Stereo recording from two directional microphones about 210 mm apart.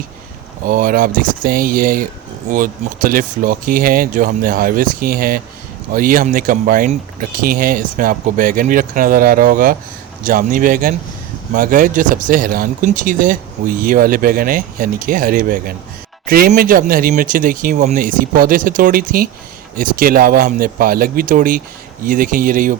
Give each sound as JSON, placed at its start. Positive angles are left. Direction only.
{"t": 0.6, "sound": "speech", "side_deg": -40}